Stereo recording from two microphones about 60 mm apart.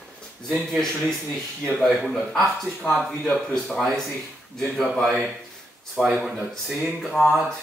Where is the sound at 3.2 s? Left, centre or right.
Centre.